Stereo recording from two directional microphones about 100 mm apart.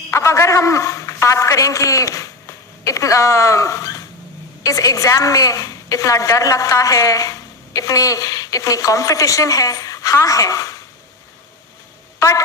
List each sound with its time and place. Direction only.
0.1 s a man's voice: 30° left (ahead or behind)